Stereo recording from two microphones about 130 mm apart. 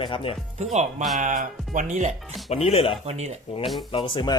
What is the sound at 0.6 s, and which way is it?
Speech, 65° right (ahead or behind).